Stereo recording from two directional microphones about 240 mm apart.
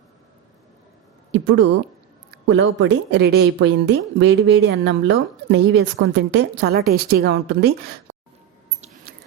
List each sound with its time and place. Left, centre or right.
1.3 s a woman's voice: right